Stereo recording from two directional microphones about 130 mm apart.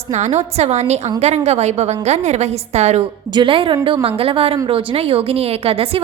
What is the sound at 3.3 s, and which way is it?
A woman's voice, 40° right (ahead or behind).